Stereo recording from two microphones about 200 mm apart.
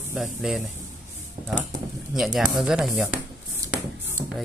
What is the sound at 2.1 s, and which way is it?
Speech, centre (ahead or behind).